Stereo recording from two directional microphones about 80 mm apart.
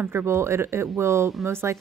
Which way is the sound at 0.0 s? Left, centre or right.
Right.